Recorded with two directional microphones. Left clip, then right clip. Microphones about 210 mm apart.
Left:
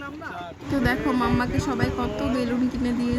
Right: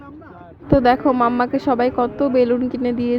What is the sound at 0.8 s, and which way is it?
Speech, 30° right (ahead or behind).